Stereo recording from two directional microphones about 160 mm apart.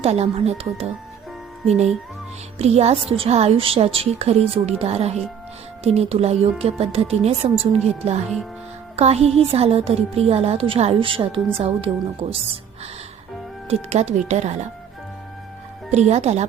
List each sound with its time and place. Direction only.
0.0 s a woman's voice: 40° right (ahead or behind)
2.6 s a woman's voice: 40° right (ahead or behind)
13.7 s speech: 45° right (ahead or behind)
15.9 s speech: 45° right (ahead or behind)